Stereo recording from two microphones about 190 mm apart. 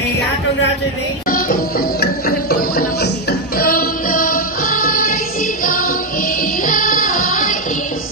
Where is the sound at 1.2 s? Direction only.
50° left (ahead or behind).